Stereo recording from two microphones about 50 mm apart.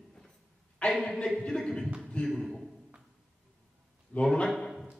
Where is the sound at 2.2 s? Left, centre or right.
Centre.